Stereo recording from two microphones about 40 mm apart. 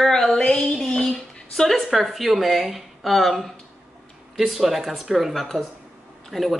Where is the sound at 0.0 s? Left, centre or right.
Centre.